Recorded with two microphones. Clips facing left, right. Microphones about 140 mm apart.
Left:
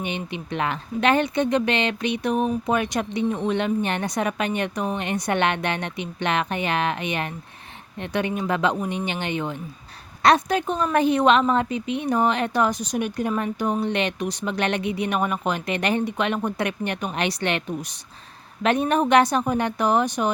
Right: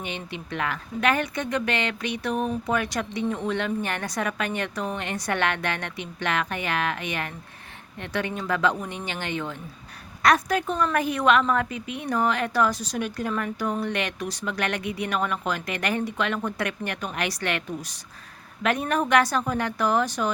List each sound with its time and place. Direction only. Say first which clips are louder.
0.0 s a woman's voice: left 5 dB; 20° left (ahead or behind)